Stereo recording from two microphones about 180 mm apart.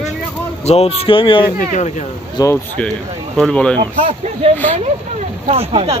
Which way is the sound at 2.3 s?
15° left (ahead or behind).